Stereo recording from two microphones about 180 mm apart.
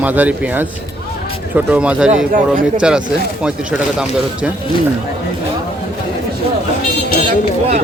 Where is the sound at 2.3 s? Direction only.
50° right (ahead or behind).